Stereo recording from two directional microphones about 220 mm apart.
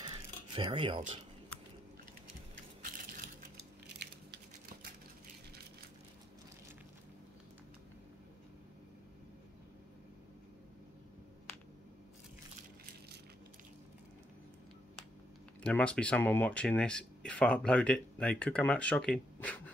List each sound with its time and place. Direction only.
0.6 s speech: 20° right (ahead or behind)
15.6 s speech: 5° left (ahead or behind)